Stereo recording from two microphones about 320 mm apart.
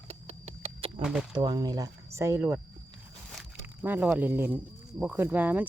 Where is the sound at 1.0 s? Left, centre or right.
Centre.